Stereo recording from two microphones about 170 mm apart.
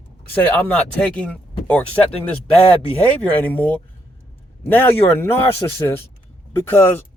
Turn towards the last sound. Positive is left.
turn(degrees=10)  # may be behind; listen again after turning